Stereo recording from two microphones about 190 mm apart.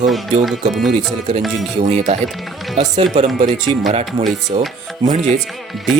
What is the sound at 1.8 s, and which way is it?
Speech, 35° right (ahead or behind).